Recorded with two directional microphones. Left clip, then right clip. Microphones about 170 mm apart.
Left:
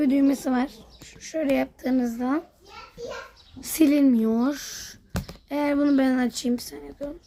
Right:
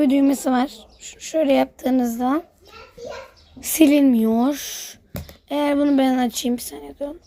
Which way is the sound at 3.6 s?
15° right (ahead or behind).